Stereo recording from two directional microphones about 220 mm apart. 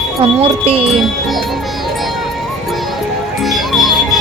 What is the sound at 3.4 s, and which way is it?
Music, centre (ahead or behind).